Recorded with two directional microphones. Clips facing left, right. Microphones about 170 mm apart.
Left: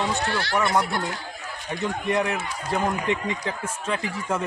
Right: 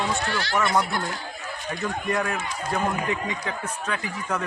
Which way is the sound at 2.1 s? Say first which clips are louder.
Left 3 dB; 20° left (ahead or behind).